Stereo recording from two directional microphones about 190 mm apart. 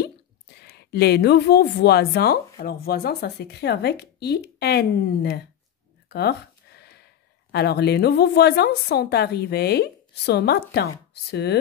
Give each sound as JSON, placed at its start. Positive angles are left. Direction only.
{"t": 0.6, "sound": "speech", "side_deg": 60}
{"t": 6.0, "sound": "a sound", "side_deg": 60}
{"t": 7.5, "sound": "speech", "side_deg": 60}